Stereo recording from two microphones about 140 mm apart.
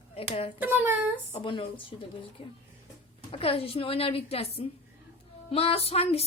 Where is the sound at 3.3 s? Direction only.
40° left (ahead or behind).